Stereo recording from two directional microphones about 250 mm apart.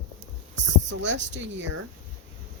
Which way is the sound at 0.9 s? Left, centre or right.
Right.